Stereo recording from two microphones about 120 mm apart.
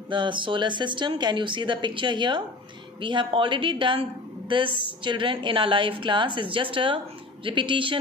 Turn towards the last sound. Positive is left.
turn(degrees=-45)  # may be behind; listen again after turning